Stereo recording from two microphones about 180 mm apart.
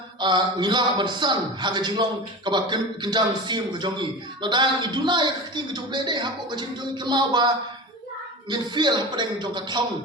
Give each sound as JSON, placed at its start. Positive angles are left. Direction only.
{"t": 0.2, "sound": "speech", "side_deg": -25}